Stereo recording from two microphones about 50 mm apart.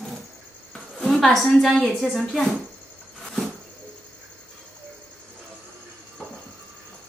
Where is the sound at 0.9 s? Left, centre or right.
Centre.